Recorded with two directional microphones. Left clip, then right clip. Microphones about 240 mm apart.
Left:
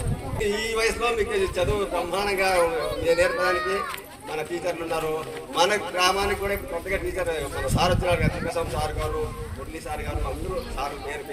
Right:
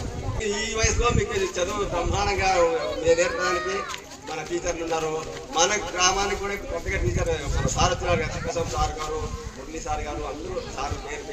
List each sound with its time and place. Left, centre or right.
0.4 s a man's voice: left